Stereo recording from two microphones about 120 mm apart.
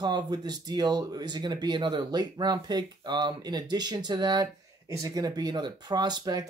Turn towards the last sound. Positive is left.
turn(degrees=-35)  # may be behind; listen again after turning